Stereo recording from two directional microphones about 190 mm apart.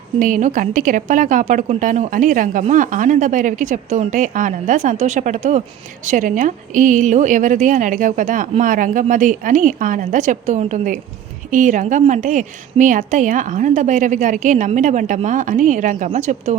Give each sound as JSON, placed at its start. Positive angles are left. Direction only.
{"t": 0.2, "sound": "a woman's voice", "side_deg": -45}